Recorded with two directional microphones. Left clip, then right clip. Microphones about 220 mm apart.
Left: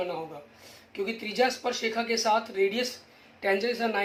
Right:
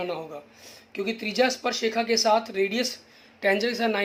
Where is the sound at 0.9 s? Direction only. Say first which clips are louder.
Right 3 dB; 50° right (ahead or behind).